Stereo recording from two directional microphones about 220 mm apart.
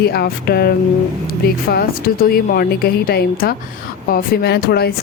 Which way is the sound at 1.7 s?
45° left (ahead or behind).